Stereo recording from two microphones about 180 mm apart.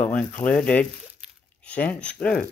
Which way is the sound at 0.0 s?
10° left (ahead or behind).